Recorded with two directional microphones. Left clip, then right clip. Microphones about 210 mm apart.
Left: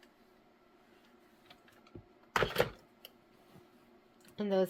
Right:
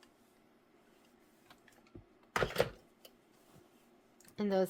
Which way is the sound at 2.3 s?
20° left (ahead or behind).